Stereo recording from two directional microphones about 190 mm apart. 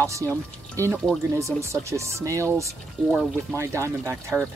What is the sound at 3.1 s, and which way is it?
Speech, 5° right (ahead or behind).